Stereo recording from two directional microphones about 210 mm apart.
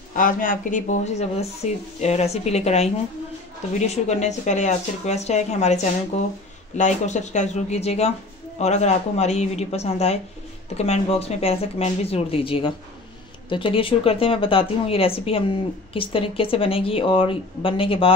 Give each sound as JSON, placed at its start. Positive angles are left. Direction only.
{"t": 0.1, "sound": "speech", "side_deg": 40}
{"t": 6.8, "sound": "speech", "side_deg": 35}